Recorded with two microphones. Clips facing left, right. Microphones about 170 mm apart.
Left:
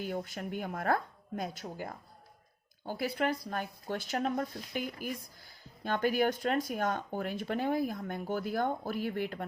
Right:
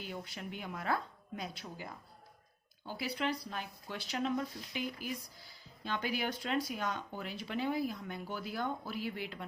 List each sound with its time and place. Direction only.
0.0 s speech: 50° left (ahead or behind)